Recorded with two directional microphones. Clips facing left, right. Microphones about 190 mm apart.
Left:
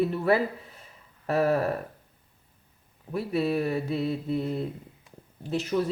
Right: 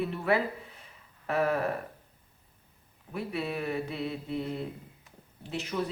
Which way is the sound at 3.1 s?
35° left (ahead or behind).